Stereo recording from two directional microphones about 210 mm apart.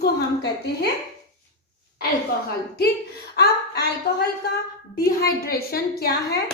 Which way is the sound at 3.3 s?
50° left (ahead or behind).